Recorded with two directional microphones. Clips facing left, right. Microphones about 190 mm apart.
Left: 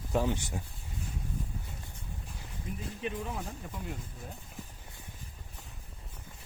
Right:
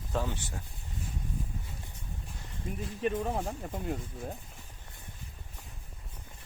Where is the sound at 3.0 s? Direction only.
45° right (ahead or behind).